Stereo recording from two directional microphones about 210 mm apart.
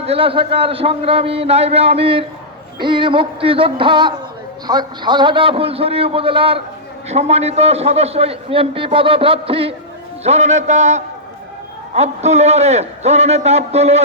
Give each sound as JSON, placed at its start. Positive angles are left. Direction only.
{"t": 0.0, "sound": "a man's voice", "side_deg": -25}